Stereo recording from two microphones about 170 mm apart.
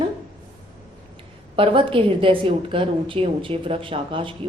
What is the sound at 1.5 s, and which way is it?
A woman's voice, 30° right (ahead or behind).